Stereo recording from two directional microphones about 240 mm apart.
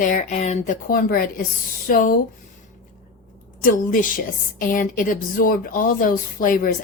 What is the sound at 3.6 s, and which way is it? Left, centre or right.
Speech, left.